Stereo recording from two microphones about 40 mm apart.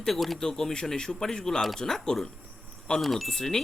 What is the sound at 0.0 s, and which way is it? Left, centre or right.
Speech, centre.